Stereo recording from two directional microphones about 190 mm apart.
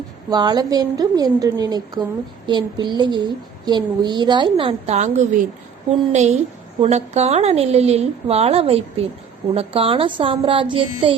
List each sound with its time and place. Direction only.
0.3 s a woman's voice: 20° right (ahead or behind)